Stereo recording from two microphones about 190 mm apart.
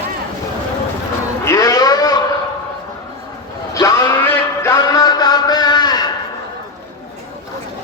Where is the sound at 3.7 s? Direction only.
20° left (ahead or behind).